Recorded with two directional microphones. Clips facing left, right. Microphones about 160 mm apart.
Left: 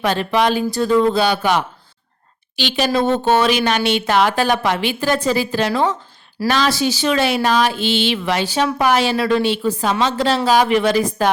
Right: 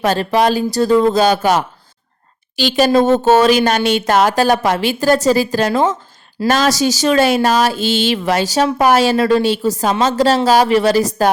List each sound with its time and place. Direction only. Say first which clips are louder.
0.0 s speech: right 3 dB; 40° right (ahead or behind)